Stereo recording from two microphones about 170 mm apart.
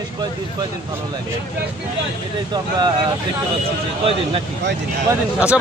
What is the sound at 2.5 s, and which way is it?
Speech, 25° right (ahead or behind).